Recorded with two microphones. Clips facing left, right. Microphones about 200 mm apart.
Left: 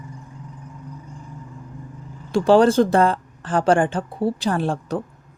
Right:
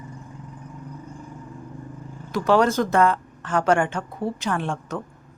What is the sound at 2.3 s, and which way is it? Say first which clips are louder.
Speech: left 5 dB; 30° left (ahead or behind).